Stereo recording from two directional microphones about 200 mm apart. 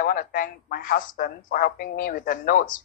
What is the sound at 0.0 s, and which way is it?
Speech, 45° left (ahead or behind).